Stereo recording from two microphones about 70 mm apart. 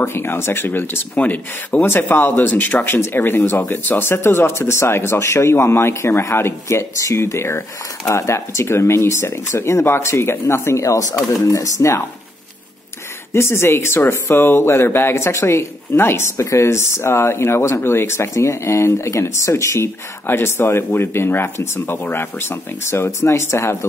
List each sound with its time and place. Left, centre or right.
0.0 s speech: left
13.3 s speech: left